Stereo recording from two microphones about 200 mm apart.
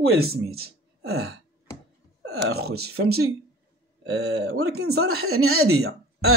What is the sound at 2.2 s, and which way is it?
Speech, 75° right (ahead or behind).